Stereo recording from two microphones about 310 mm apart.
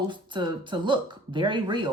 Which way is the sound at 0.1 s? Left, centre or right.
Centre.